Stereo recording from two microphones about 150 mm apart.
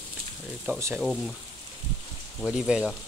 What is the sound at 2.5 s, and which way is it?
Speech, 5° right (ahead or behind).